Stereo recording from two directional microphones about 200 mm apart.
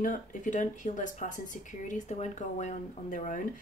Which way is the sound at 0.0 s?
40° left (ahead or behind).